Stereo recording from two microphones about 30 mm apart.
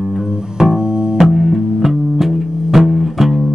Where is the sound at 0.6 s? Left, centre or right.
Centre.